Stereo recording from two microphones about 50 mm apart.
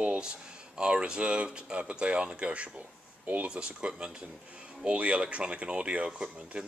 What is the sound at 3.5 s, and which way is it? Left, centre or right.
Speech, centre.